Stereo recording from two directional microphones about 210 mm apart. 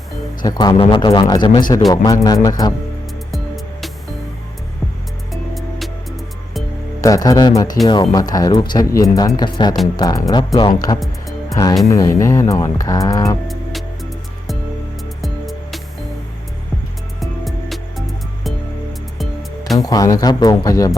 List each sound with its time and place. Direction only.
0.4 s speech: 20° left (ahead or behind)
3.3 s music: centre (ahead or behind)
5.3 s music: centre (ahead or behind)
7.0 s speech: 15° left (ahead or behind)
11.0 s music: centre (ahead or behind)
11.5 s speech: 15° left (ahead or behind)
15.2 s music: centre (ahead or behind)
17.2 s music: centre (ahead or behind)
19.8 s speech: 15° left (ahead or behind)